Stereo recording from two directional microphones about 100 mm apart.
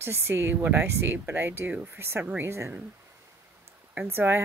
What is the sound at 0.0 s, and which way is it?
Speech, 25° right (ahead or behind).